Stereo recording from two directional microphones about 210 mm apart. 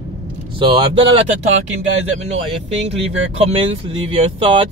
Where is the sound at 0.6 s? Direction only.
25° right (ahead or behind).